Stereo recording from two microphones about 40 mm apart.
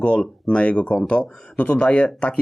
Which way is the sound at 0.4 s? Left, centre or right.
Left.